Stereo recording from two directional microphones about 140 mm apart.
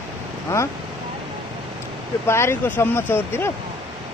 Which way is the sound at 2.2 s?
20° left (ahead or behind).